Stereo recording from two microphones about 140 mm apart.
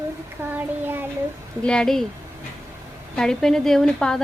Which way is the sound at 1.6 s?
5° left (ahead or behind).